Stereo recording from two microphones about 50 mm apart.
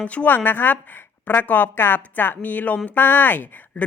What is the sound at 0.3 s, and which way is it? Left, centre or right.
A woman's voice, left.